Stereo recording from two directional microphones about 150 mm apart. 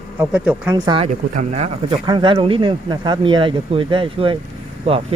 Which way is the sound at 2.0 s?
30° right (ahead or behind).